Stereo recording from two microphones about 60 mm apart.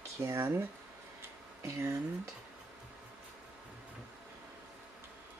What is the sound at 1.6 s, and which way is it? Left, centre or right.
Speech, right.